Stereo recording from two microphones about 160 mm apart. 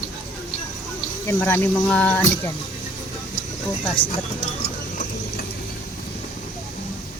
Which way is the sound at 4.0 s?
35° left (ahead or behind).